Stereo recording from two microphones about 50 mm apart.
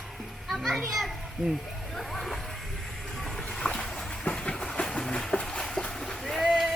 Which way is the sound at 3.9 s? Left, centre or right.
Centre.